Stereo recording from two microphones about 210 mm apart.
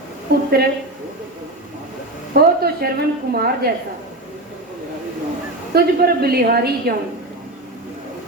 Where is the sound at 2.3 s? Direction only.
45° right (ahead or behind).